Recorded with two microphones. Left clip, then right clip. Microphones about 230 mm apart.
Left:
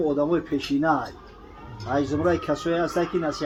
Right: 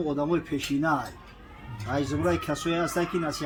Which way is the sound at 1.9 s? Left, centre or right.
Right.